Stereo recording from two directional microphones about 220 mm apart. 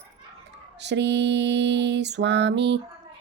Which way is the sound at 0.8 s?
50° right (ahead or behind).